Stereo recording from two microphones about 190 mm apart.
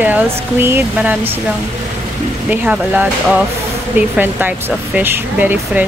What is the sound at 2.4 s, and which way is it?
Speech, 5° right (ahead or behind).